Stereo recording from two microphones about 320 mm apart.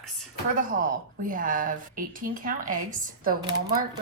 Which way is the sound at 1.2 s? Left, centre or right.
Right.